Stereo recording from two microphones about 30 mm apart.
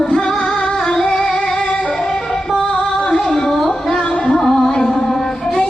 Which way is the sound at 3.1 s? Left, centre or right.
Left.